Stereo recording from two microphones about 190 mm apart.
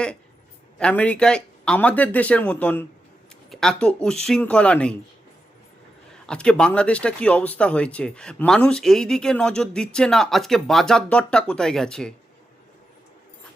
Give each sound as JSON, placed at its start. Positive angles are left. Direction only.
{"t": 0.8, "sound": "speech", "side_deg": 5}
{"t": 6.2, "sound": "speech", "side_deg": 5}